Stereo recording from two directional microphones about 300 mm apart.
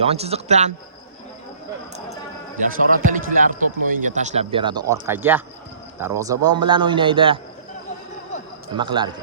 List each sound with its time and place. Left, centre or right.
0.0 s speech: centre
2.6 s a man's voice: right
8.7 s a man's voice: centre